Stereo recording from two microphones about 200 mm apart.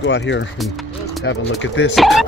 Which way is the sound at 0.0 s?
65° left (ahead or behind).